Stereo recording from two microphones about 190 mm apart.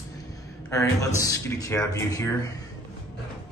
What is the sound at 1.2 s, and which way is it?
Speech, 15° left (ahead or behind).